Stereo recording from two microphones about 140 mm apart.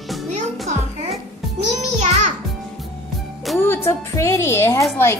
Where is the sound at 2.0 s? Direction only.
55° right (ahead or behind).